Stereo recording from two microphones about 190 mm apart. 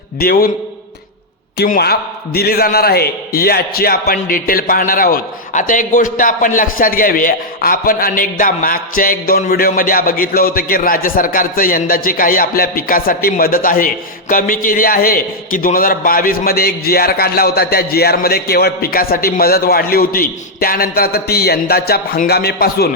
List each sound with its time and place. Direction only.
0.2 s a man's voice: 50° left (ahead or behind)
1.5 s a man's voice: 50° left (ahead or behind)